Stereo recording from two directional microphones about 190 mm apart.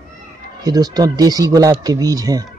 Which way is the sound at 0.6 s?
20° right (ahead or behind).